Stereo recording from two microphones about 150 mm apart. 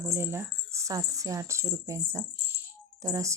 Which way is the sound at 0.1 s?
15° right (ahead or behind).